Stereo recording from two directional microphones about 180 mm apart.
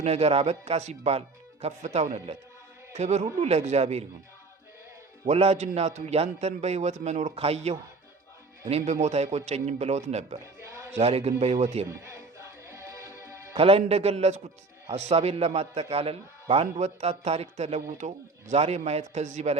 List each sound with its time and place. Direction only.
0.0 s a man's voice: 35° right (ahead or behind)
5.2 s a man's voice: 35° right (ahead or behind)
8.9 s a man's voice: 40° right (ahead or behind)
10.4 s music: 15° right (ahead or behind)
10.9 s a man's voice: 35° right (ahead or behind)
11.9 s music: 15° right (ahead or behind)
13.6 s a man's voice: 30° right (ahead or behind)